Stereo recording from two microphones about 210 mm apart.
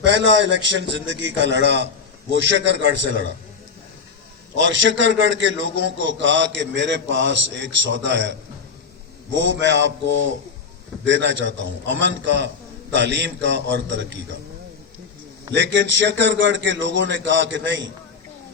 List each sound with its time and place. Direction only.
0.0 s a man's voice: 60° right (ahead or behind)
4.6 s a man's voice: 60° right (ahead or behind)
11.0 s a man's voice: 60° right (ahead or behind)
15.5 s a man's voice: 60° right (ahead or behind)